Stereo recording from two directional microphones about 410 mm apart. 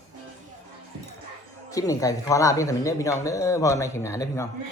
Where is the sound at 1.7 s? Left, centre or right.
Centre.